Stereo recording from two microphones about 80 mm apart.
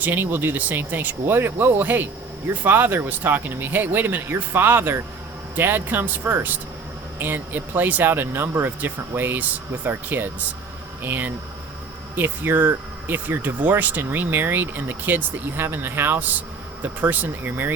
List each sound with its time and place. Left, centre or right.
0.0 s speech: right